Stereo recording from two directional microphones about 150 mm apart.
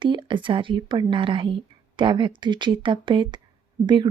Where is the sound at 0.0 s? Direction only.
35° right (ahead or behind).